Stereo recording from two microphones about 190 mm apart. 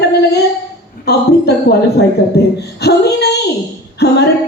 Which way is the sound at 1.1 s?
60° left (ahead or behind).